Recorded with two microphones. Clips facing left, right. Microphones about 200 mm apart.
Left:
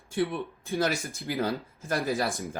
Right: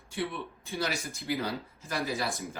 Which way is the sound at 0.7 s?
50° left (ahead or behind).